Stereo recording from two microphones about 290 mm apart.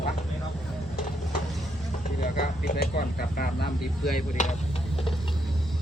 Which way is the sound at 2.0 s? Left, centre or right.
Left.